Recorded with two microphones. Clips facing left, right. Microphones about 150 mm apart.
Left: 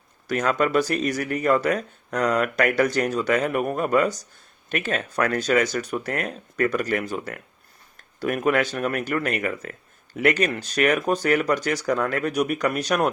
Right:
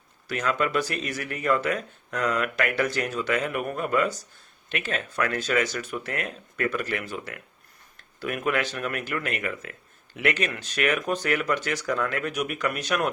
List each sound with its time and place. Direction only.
0.3 s speech: 45° left (ahead or behind)